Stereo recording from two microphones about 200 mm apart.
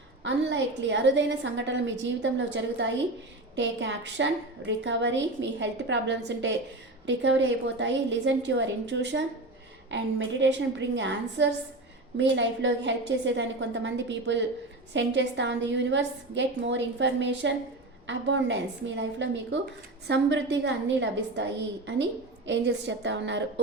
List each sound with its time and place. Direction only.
0.3 s a woman's voice: 60° right (ahead or behind)
22.4 s a woman's voice: 60° right (ahead or behind)